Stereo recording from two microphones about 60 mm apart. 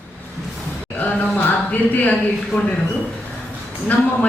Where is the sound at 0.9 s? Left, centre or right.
Left.